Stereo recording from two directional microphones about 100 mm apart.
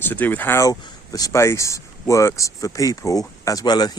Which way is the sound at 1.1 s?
40° left (ahead or behind).